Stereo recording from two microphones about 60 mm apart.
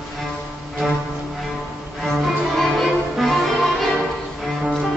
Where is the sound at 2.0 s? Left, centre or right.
Centre.